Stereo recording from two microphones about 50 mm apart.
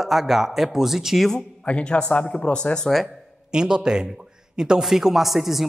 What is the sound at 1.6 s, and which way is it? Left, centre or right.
Speech, left.